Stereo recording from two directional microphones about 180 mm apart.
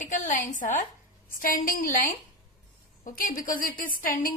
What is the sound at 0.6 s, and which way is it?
A woman's voice, 40° left (ahead or behind).